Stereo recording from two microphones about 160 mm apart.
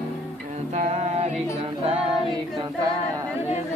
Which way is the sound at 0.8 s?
45° right (ahead or behind).